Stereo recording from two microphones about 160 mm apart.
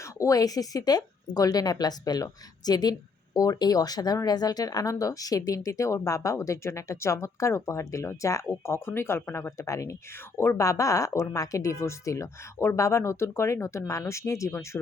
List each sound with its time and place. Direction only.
0.0 s speech: 20° left (ahead or behind)